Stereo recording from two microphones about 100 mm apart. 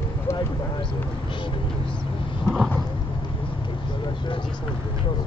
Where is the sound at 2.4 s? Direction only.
5° right (ahead or behind).